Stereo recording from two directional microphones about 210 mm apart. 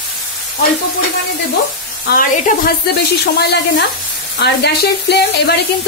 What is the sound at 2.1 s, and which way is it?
A woman's voice, 45° left (ahead or behind).